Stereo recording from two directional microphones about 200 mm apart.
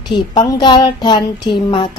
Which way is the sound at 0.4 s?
20° left (ahead or behind).